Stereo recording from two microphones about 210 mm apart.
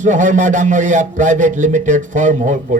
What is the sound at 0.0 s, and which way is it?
Speech, 35° right (ahead or behind).